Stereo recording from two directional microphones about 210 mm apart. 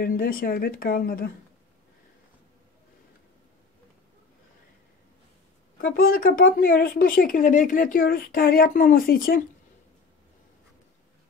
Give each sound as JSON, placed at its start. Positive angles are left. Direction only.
{"t": 0.0, "sound": "speech", "side_deg": 45}
{"t": 5.9, "sound": "speech", "side_deg": 45}